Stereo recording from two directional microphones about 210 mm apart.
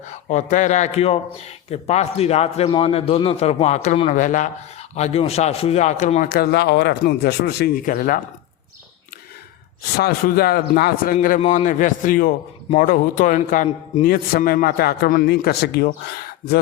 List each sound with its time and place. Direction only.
0.0 s a man's voice: 35° left (ahead or behind)
10.0 s a man's voice: 45° left (ahead or behind)